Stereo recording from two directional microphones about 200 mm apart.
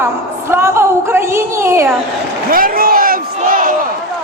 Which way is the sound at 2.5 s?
45° right (ahead or behind).